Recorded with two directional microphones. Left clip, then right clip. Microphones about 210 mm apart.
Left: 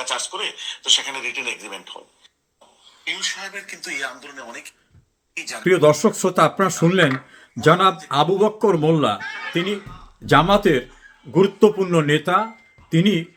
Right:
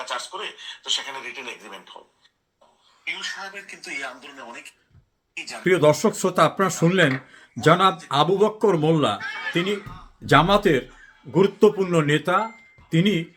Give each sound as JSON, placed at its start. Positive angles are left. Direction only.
{"t": 0.0, "sound": "speech", "side_deg": 35}
{"t": 3.2, "sound": "speech", "side_deg": 40}
{"t": 5.6, "sound": "speech", "side_deg": 10}